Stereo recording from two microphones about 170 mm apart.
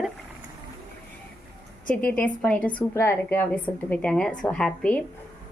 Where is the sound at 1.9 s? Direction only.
10° left (ahead or behind).